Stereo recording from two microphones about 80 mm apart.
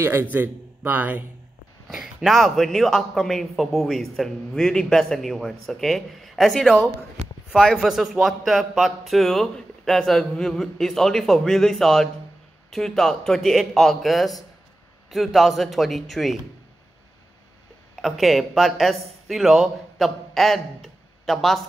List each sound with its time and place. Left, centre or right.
0.0 s a man's voice: right
2.2 s a man's voice: centre
7.8 s a man's voice: centre
18.0 s speech: centre